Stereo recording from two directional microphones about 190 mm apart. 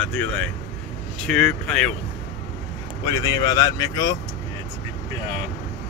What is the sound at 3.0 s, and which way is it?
Speech, 20° left (ahead or behind).